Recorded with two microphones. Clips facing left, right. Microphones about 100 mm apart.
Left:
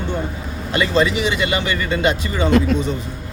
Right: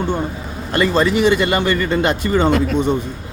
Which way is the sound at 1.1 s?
50° right (ahead or behind).